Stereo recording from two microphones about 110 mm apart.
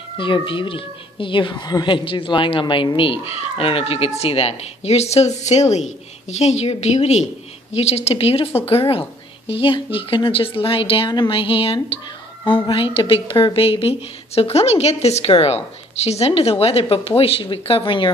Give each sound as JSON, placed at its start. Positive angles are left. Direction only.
{"t": 0.2, "sound": "a woman's voice", "side_deg": 50}
{"t": 7.7, "sound": "a woman's voice", "side_deg": 70}
{"t": 9.5, "sound": "a woman's voice", "side_deg": 55}